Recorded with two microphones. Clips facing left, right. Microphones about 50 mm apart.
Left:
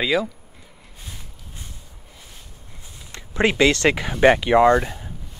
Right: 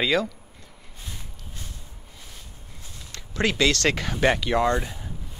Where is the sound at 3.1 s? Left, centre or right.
Left.